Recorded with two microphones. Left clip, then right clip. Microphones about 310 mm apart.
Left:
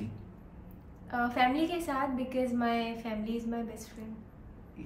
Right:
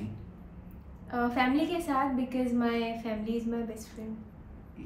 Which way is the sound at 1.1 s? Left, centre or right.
Centre.